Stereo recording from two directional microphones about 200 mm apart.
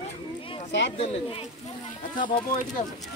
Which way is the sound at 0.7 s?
65° left (ahead or behind).